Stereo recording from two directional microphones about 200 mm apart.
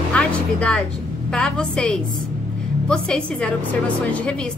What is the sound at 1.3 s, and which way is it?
A woman's voice, 5° left (ahead or behind).